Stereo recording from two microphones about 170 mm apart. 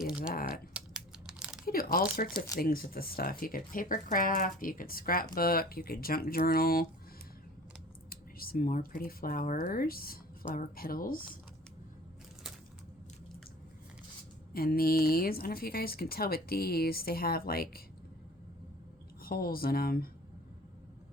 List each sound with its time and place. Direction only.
0.0 s speech: 5° right (ahead or behind)
0.3 s speech: 60° left (ahead or behind)
0.7 s a sound: 5° right (ahead or behind)
1.6 s speech: 60° left (ahead or behind)
8.1 s speech: 60° left (ahead or behind)
14.5 s speech: 60° left (ahead or behind)
19.2 s speech: 60° left (ahead or behind)